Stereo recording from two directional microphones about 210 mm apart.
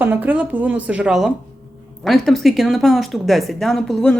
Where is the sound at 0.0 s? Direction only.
10° right (ahead or behind).